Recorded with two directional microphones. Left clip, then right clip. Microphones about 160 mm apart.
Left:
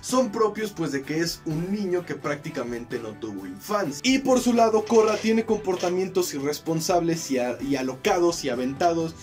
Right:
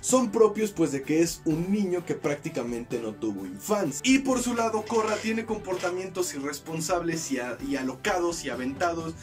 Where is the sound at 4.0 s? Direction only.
25° left (ahead or behind).